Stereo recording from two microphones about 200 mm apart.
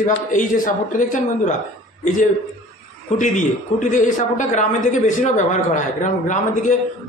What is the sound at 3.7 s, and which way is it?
A man's voice, 40° left (ahead or behind).